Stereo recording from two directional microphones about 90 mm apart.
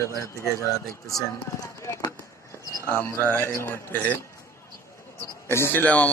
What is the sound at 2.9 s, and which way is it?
Speech, 25° left (ahead or behind).